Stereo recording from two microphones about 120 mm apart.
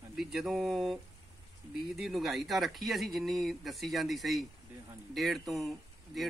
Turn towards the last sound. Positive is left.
turn(degrees=0)  # may be behind; listen again after turning